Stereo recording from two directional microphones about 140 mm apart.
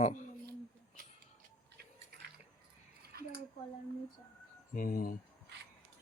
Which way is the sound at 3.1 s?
90° right.